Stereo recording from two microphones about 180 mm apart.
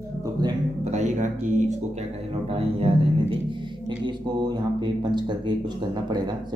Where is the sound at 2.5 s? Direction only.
35° right (ahead or behind).